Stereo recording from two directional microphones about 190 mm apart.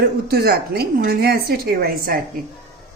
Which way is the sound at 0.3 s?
55° right (ahead or behind).